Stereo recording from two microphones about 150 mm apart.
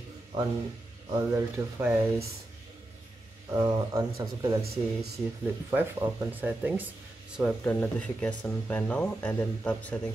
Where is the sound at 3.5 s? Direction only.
25° right (ahead or behind).